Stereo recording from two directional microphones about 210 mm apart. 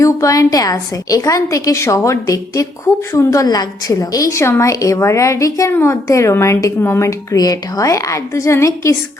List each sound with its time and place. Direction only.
0.0 s a woman's voice: 15° left (ahead or behind)